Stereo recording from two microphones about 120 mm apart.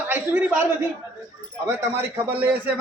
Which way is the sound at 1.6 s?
20° right (ahead or behind).